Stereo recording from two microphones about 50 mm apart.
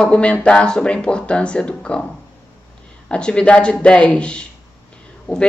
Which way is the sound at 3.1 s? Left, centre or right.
Centre.